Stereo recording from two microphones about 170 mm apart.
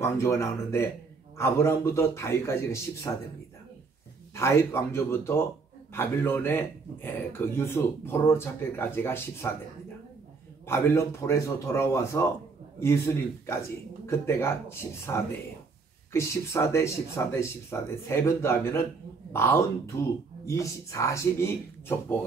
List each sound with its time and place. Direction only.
0.0 s speech: 15° left (ahead or behind)
4.4 s speech: 15° left (ahead or behind)
10.7 s speech: 15° left (ahead or behind)
16.1 s speech: 15° left (ahead or behind)